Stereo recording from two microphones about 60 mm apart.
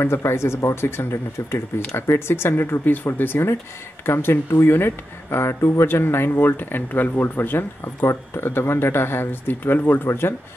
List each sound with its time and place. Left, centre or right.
0.0 s speech: left